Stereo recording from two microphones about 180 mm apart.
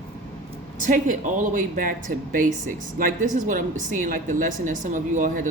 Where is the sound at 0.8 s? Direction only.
45° right (ahead or behind).